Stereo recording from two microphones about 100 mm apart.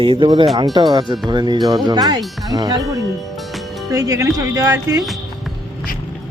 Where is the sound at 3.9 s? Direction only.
35° right (ahead or behind).